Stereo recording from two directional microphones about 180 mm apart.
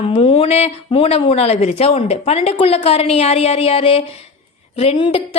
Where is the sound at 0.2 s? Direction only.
30° left (ahead or behind).